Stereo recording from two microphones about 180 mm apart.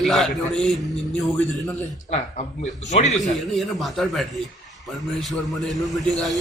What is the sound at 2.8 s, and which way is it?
Speech, 40° left (ahead or behind).